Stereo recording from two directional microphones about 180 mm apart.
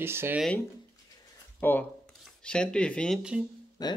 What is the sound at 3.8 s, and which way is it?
Speech, 20° left (ahead or behind).